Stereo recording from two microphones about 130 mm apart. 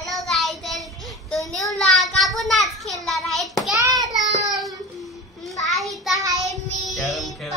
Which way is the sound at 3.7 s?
25° right (ahead or behind).